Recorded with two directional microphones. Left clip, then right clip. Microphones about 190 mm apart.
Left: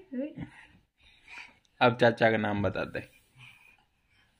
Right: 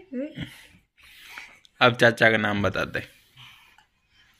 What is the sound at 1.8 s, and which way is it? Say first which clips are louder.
Speech: right 5 dB; 5° left (ahead or behind).